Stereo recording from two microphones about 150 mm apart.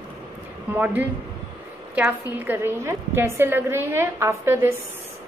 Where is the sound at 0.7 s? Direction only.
10° right (ahead or behind).